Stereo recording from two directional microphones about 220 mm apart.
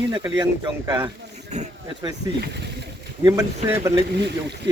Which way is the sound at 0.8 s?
15° right (ahead or behind).